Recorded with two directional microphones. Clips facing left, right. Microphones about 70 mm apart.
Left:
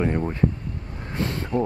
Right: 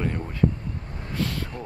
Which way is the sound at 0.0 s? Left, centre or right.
Left.